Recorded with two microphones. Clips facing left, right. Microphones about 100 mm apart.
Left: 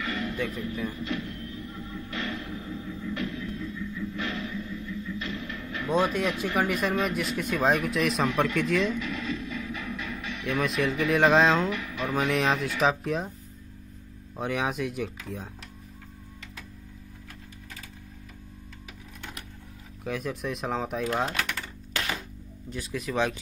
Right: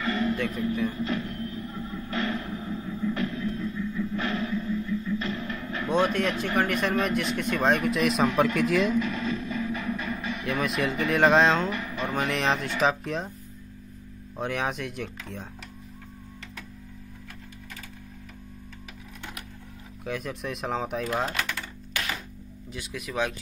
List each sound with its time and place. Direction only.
0.0 s music: 35° right (ahead or behind)
0.5 s speech: 35° right (ahead or behind)
0.9 s music: 35° right (ahead or behind)
5.9 s speech: centre (ahead or behind)
8.9 s music: 45° right (ahead or behind)
10.4 s speech: centre (ahead or behind)
11.7 s music: 35° right (ahead or behind)
12.1 s speech: centre (ahead or behind)
14.3 s speech: centre (ahead or behind)
20.1 s speech: centre (ahead or behind)
22.7 s speech: centre (ahead or behind)